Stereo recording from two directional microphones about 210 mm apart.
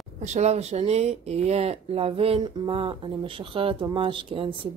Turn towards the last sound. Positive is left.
turn(degrees=-25)  # may be behind; listen again after turning